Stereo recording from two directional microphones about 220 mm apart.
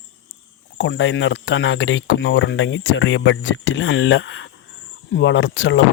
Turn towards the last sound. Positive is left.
turn(degrees=60)  # may be behind; listen again after turning